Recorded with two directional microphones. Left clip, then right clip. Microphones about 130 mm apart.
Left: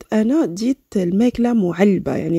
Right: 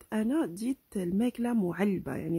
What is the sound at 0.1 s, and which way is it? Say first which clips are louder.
Speech: left 13 dB; 30° left (ahead or behind).